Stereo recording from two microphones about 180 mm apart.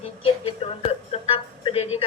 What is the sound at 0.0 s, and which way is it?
Music, 30° left (ahead or behind).